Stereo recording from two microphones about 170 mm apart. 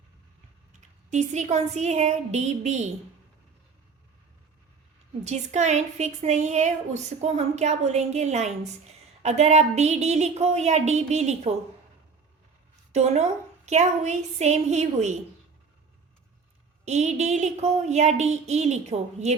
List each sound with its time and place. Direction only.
0.7 s a woman's voice: 45° right (ahead or behind)
5.2 s a woman's voice: 45° right (ahead or behind)
12.9 s a woman's voice: 40° right (ahead or behind)
16.8 s a woman's voice: 40° right (ahead or behind)